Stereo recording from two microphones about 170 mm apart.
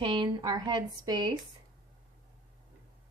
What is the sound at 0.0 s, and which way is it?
Speech, 30° right (ahead or behind).